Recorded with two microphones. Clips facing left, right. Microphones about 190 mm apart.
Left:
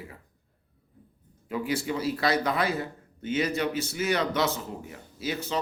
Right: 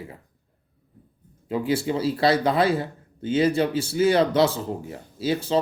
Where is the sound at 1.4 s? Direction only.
30° right (ahead or behind).